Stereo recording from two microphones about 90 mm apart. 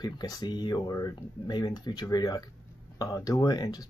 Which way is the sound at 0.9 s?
45° left (ahead or behind).